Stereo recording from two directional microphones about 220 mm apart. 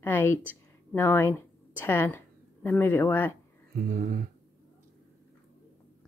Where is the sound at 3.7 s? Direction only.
40° right (ahead or behind).